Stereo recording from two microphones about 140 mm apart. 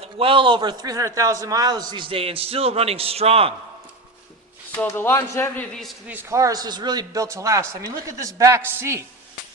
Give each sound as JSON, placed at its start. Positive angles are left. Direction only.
{"t": 0.0, "sound": "a man's voice", "side_deg": -40}
{"t": 4.9, "sound": "a man's voice", "side_deg": 15}
{"t": 6.1, "sound": "speech", "side_deg": -15}